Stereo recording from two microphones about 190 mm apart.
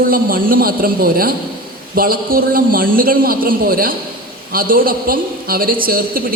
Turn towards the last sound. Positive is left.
turn(degrees=-50)  # may be behind; listen again after turning